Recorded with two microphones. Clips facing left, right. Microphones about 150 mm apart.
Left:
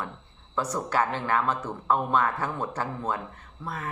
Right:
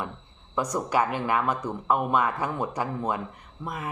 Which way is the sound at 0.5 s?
15° right (ahead or behind).